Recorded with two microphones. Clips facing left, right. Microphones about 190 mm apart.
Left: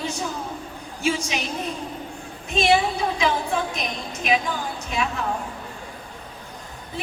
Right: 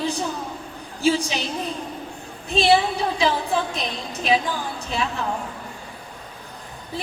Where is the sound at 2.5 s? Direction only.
30° right (ahead or behind).